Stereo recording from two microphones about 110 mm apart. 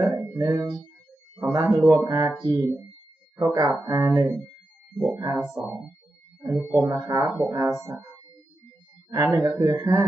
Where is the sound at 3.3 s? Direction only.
30° right (ahead or behind).